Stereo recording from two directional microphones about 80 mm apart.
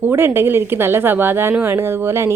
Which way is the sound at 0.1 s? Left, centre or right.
Right.